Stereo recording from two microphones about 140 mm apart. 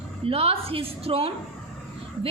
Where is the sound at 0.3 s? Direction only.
45° right (ahead or behind).